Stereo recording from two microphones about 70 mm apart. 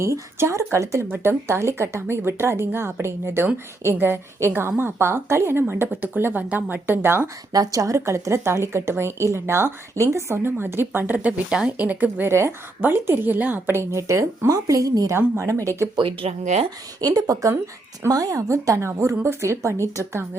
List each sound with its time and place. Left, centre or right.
0.0 s speech: right
1.0 s speech: right
7.5 s speech: right; by 11.9 s centre
11.9 s a woman's voice: right
12.3 s speech: right
15.1 s speech: right
17.0 s speech: right